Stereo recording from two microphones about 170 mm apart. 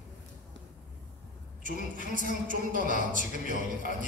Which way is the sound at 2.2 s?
55° right (ahead or behind).